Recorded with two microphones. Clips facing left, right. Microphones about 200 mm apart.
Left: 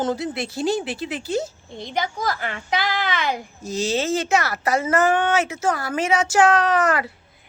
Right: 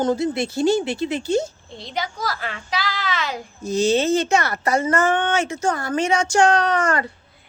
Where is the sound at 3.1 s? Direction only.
55° left (ahead or behind).